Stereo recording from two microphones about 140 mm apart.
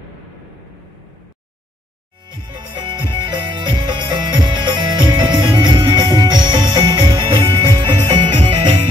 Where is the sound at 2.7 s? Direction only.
35° right (ahead or behind).